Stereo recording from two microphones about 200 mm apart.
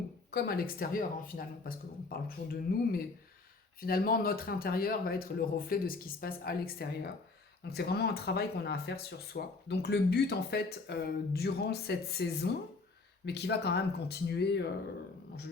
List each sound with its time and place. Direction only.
0.3 s speech: 50° left (ahead or behind)